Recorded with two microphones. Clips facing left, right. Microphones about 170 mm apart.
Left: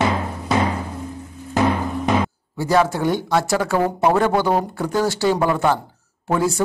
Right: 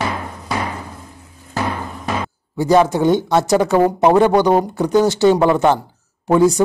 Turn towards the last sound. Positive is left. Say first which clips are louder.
# right 7 dB
turn(degrees=-20)  # may be behind; listen again after turning